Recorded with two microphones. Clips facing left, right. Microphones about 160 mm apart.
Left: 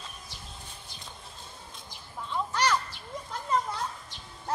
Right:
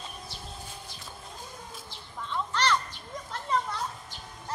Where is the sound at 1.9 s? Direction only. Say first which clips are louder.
Left 1 dB; 10° left (ahead or behind).